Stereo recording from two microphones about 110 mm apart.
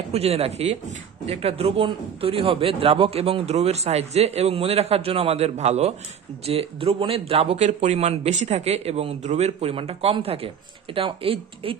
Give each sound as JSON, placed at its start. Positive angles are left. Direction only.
{"t": 0.1, "sound": "a man's voice", "side_deg": -65}